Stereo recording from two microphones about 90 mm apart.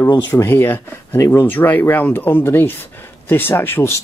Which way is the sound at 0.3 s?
25° left (ahead or behind).